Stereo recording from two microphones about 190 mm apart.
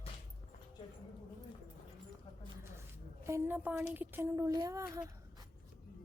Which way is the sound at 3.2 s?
15° right (ahead or behind).